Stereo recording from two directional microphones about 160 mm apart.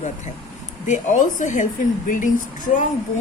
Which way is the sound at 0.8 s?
50° left (ahead or behind).